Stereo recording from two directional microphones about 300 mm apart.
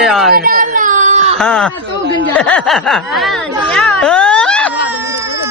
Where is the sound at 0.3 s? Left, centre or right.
Right.